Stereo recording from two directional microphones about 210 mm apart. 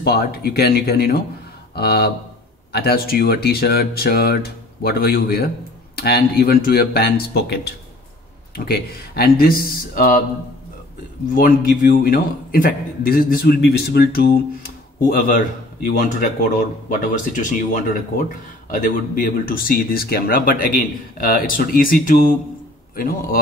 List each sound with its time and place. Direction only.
0.0 s speech: 50° left (ahead or behind)
11.3 s speech: 40° left (ahead or behind)